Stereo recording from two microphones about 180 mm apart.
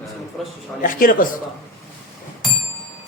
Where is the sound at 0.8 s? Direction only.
50° left (ahead or behind).